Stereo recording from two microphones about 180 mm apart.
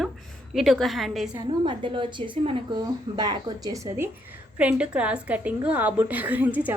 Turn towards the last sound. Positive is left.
turn(degrees=-10)  # may be behind; listen again after turning